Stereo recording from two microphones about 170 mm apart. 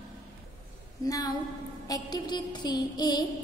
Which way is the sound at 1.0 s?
20° left (ahead or behind).